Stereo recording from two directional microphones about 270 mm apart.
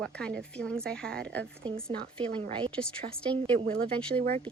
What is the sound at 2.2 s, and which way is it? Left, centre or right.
Speech, centre.